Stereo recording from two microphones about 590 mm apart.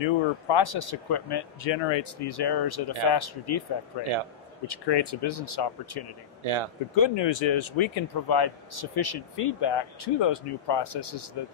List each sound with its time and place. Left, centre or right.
0.0 s speech: left
6.4 s speech: right
7.0 s speech: left